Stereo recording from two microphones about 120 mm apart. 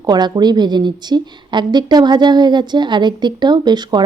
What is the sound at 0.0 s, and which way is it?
A woman's voice, 35° right (ahead or behind).